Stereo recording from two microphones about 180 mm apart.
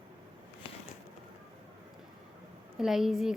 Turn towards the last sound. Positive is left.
turn(degrees=0)  # may be behind; listen again after turning